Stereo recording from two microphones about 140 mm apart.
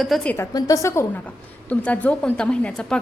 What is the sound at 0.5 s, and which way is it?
Speech, 25° left (ahead or behind).